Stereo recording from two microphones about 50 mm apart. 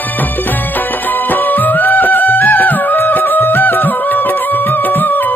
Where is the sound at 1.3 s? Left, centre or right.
Left.